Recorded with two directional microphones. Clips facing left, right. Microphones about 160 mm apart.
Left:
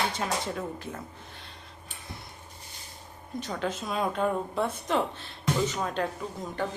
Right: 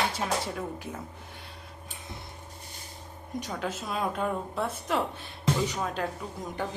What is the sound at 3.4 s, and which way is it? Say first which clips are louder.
A woman's voice: left 3 dB; 5° right (ahead or behind).